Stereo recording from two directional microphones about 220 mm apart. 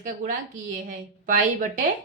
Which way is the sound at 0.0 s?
35° right (ahead or behind).